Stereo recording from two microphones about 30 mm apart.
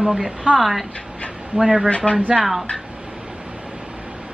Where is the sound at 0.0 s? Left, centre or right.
Centre.